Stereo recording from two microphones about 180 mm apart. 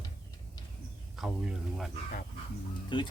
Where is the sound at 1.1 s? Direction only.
Centre (ahead or behind).